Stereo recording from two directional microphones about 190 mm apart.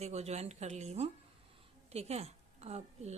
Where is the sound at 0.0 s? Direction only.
35° right (ahead or behind).